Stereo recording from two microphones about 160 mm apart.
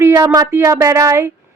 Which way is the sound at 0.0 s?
20° right (ahead or behind).